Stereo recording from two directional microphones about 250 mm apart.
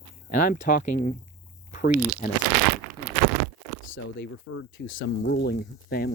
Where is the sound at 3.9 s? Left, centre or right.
Left.